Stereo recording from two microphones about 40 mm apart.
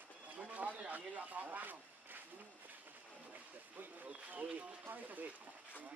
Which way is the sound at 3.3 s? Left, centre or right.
Right.